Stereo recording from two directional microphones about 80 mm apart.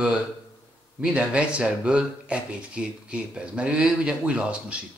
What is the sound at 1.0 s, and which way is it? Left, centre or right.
A man's voice, centre.